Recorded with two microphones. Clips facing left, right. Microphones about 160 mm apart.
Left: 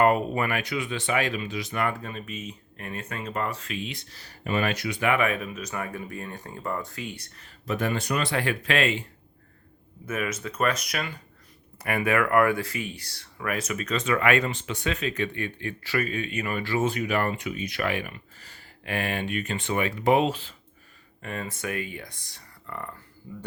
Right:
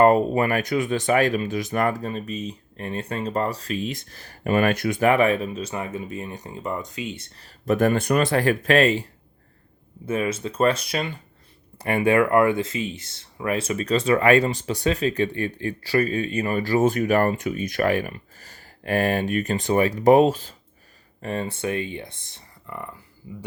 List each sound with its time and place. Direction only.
0.0 s speech: 35° right (ahead or behind); by 7.3 s 20° right (ahead or behind)
7.6 s speech: 50° right (ahead or behind)
10.1 s speech: 30° right (ahead or behind)